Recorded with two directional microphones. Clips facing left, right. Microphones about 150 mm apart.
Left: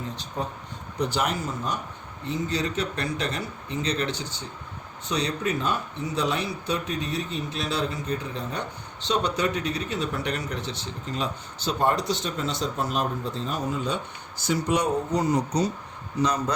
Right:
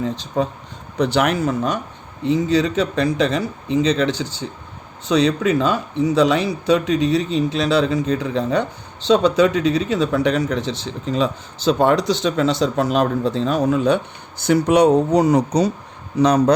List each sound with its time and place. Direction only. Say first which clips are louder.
0.0 s speech: right 11 dB; 90° right
0.9 s speech: right 9 dB; 75° right (ahead or behind)
2.2 s speech: right 11 dB; 90° right; by 16.6 s 75° right (ahead or behind)